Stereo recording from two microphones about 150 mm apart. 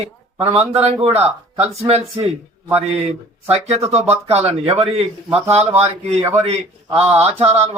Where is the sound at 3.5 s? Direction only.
45° right (ahead or behind).